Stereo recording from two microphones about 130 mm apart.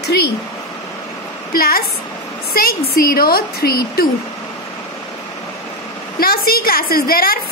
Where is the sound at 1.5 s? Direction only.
90° left.